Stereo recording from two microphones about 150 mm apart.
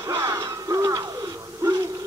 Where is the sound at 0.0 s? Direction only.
25° right (ahead or behind).